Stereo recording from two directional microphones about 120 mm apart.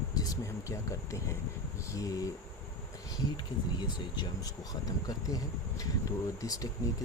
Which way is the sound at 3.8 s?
40° left (ahead or behind).